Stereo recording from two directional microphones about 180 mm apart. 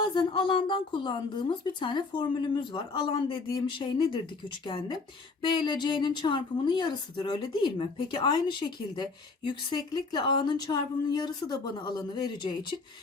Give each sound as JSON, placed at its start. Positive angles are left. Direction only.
{"t": 0.0, "sound": "speech", "side_deg": 25}